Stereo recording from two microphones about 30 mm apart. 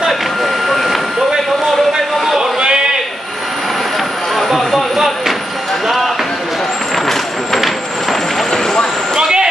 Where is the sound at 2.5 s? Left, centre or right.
Right.